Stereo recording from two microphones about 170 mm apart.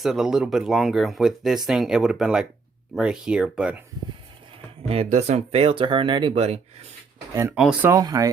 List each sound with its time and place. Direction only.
0.0 s speech: centre (ahead or behind)
4.9 s speech: 40° right (ahead or behind)
7.5 s speech: 5° right (ahead or behind)
7.9 s speech: 20° right (ahead or behind)